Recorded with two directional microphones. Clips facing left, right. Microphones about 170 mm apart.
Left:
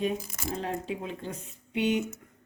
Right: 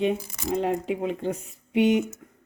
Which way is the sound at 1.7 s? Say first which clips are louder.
Right 7 dB; 15° right (ahead or behind).